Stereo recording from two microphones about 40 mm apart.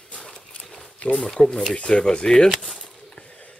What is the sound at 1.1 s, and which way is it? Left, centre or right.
Speech, centre.